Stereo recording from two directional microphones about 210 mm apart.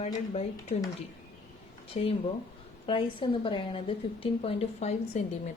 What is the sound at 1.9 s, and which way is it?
Speech, 35° left (ahead or behind).